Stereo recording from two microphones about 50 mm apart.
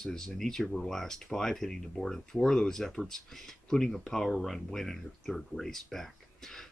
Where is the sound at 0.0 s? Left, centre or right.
Centre.